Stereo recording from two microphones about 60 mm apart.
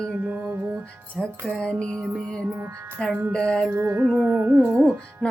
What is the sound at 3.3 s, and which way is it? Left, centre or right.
Music, centre.